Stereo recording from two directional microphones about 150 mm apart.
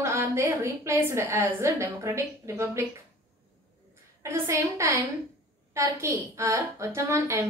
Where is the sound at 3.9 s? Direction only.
20° right (ahead or behind).